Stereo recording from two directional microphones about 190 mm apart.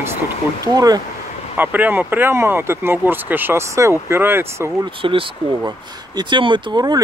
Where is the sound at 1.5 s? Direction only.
10° right (ahead or behind).